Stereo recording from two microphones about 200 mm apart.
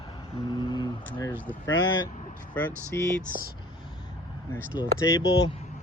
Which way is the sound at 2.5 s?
10° left (ahead or behind).